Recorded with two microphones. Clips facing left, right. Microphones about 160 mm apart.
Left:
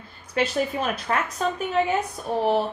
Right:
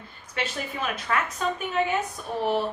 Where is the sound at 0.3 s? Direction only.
40° left (ahead or behind).